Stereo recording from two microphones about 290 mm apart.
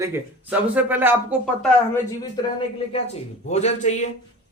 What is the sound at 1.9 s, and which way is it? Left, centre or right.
Speech, centre.